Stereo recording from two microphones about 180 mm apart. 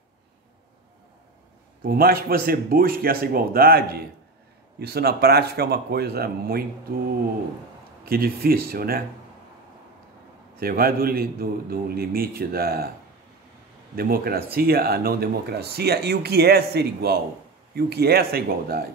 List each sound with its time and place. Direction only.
1.8 s speech: 55° right (ahead or behind)
8.0 s speech: 55° right (ahead or behind)
10.6 s speech: 55° right (ahead or behind)
13.9 s speech: 55° right (ahead or behind)